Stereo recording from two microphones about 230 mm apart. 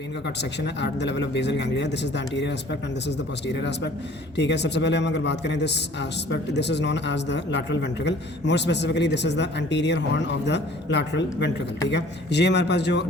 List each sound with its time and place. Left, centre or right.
0.6 s a man's voice: left